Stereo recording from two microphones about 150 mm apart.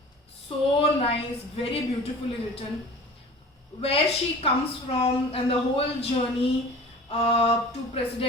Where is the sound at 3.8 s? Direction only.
40° left (ahead or behind).